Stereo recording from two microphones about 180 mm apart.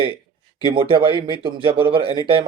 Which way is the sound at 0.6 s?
25° right (ahead or behind).